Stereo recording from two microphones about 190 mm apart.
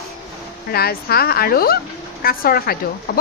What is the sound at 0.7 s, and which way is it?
A woman's voice, 55° left (ahead or behind).